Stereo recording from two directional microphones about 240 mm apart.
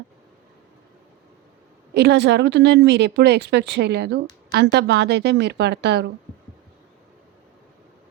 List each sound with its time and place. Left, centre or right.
1.9 s speech: right